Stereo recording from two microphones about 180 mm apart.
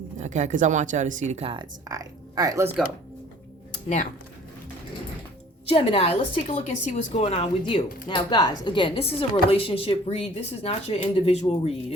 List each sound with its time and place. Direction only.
0.2 s speech: 40° right (ahead or behind)
1.9 s speech: 20° right (ahead or behind)
3.8 s speech: 45° left (ahead or behind)
5.6 s a woman's voice: 35° left (ahead or behind)